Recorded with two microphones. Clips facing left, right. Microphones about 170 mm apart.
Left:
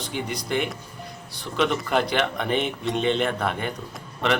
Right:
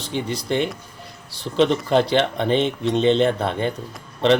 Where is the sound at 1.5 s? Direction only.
30° right (ahead or behind).